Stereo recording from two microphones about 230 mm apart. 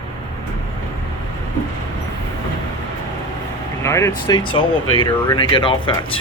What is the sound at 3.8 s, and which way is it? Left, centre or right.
Speech, centre.